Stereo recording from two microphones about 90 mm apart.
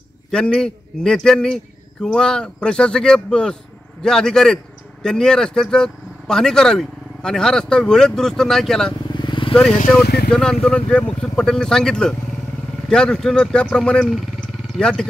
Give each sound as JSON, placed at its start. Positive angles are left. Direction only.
{"t": 0.3, "sound": "speech", "side_deg": 5}
{"t": 9.1, "sound": "vehicle", "side_deg": 60}
{"t": 9.5, "sound": "speech", "side_deg": 10}